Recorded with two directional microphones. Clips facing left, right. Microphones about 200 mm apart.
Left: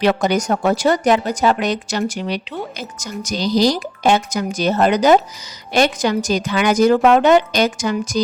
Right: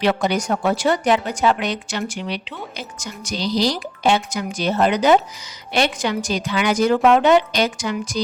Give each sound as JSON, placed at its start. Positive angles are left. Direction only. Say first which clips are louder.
{"t": 0.0, "sound": "a woman's voice", "louder": "left 3 dB", "side_deg": 45}